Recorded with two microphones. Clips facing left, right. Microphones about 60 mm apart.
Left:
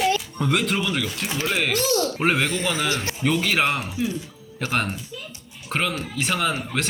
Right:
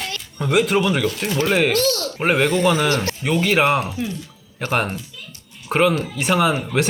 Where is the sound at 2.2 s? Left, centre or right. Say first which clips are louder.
Right 6 dB; centre.